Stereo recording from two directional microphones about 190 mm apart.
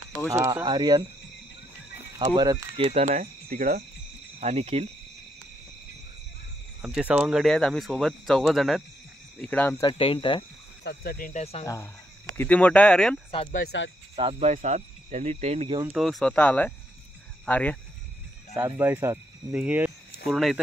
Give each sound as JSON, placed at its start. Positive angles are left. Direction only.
{"t": 0.3, "sound": "speech", "side_deg": -15}
{"t": 2.1, "sound": "speech", "side_deg": -25}
{"t": 2.8, "sound": "speech", "side_deg": -35}
{"t": 4.4, "sound": "speech", "side_deg": -35}
{"t": 6.8, "sound": "speech", "side_deg": -5}
{"t": 9.8, "sound": "speech", "side_deg": 25}
{"t": 10.8, "sound": "speech", "side_deg": 55}
{"t": 11.6, "sound": "speech", "side_deg": 15}
{"t": 13.7, "sound": "speech", "side_deg": 75}
{"t": 14.1, "sound": "speech", "side_deg": -35}
{"t": 15.9, "sound": "speech", "side_deg": 0}
{"t": 18.5, "sound": "speech", "side_deg": -15}